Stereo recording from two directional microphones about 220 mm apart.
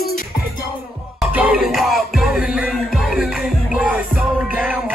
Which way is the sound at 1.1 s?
5° right (ahead or behind).